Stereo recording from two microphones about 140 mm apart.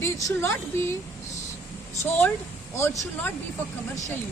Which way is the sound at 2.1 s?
15° left (ahead or behind).